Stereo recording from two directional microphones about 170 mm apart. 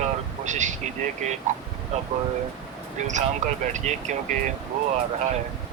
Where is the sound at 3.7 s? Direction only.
45° right (ahead or behind).